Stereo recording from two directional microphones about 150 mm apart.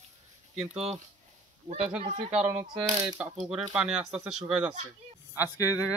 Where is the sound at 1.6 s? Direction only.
40° right (ahead or behind).